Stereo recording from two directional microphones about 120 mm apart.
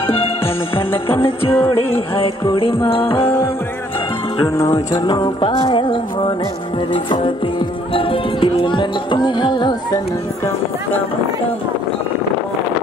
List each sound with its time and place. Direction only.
0.0 s music: 50° left (ahead or behind)
4.6 s music: 35° left (ahead or behind)
7.2 s speech: 45° left (ahead or behind)